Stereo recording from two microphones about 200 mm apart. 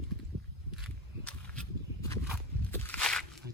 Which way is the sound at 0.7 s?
Centre (ahead or behind).